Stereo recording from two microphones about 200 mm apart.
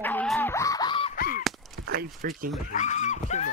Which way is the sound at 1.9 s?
45° right (ahead or behind).